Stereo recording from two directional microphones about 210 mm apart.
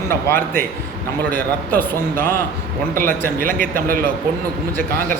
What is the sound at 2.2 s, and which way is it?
Speech, 10° left (ahead or behind).